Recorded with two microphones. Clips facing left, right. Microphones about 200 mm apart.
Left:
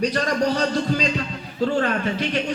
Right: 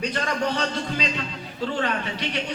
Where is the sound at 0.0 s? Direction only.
40° left (ahead or behind).